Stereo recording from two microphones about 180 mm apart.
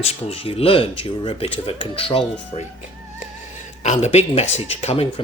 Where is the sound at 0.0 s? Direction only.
30° left (ahead or behind).